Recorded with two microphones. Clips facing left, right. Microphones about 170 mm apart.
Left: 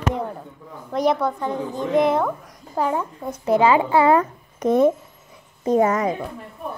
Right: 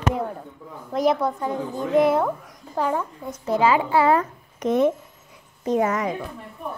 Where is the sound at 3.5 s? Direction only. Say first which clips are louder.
Left 3 dB; 20° left (ahead or behind).